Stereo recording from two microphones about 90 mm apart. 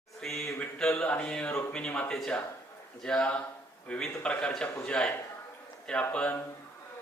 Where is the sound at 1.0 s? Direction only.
15° left (ahead or behind).